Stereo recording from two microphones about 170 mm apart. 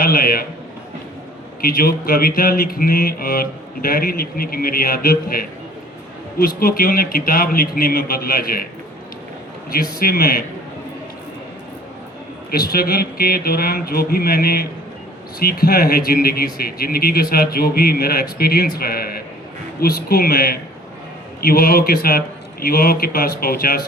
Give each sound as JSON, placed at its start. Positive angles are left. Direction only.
{"t": 0.0, "sound": "speech", "side_deg": 60}
{"t": 1.6, "sound": "speech", "side_deg": 60}
{"t": 9.7, "sound": "speech", "side_deg": 60}
{"t": 12.5, "sound": "speech", "side_deg": 65}